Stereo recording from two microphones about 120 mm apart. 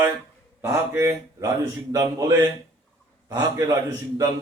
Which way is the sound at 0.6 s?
25° right (ahead or behind).